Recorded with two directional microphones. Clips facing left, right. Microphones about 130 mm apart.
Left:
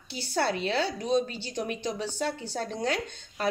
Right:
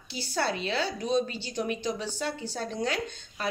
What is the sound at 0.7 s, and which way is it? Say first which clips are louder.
A woman's voice: left 2 dB; 20° left (ahead or behind).